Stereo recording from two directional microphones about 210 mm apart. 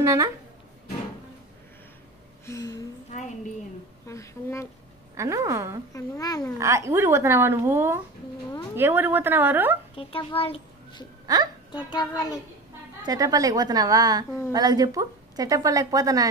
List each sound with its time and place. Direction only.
0.0 s speech: 15° right (ahead or behind)
2.4 s a sound: 15° left (ahead or behind)
4.1 s speech: 15° left (ahead or behind)
5.1 s speech: 15° right (ahead or behind)
5.9 s speech: 15° left (ahead or behind)
6.6 s speech: 15° right (ahead or behind)
9.9 s a child's voice: 25° left (ahead or behind)
13.0 s speech: 15° right (ahead or behind)